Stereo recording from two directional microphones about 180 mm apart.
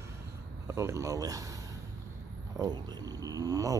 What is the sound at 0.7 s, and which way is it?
A man's voice, 15° right (ahead or behind).